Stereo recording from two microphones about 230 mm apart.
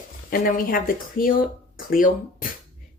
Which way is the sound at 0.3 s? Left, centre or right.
Left.